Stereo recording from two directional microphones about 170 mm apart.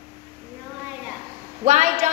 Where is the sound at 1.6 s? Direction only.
45° right (ahead or behind).